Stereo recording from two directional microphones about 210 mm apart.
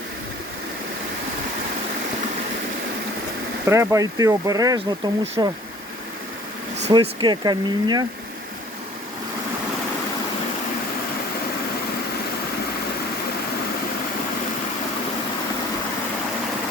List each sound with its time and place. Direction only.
3.7 s speech: 15° right (ahead or behind)
6.9 s speech: 20° right (ahead or behind)